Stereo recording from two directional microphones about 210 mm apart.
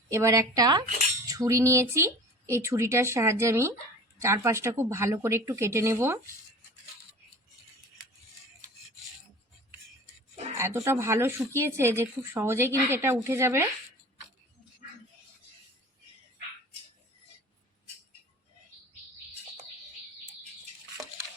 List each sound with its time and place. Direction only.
0.1 s speech: 15° right (ahead or behind)
10.6 s speech: 15° right (ahead or behind)